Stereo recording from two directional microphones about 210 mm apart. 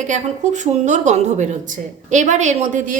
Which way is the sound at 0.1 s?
35° right (ahead or behind).